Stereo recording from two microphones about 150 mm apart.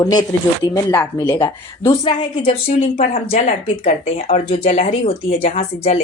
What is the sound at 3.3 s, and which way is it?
Speech, 55° left (ahead or behind).